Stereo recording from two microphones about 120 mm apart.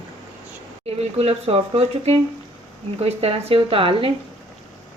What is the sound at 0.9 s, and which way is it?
Speech, 55° right (ahead or behind).